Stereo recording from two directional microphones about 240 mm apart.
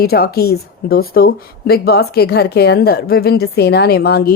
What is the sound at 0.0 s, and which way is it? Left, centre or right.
A woman's voice, left.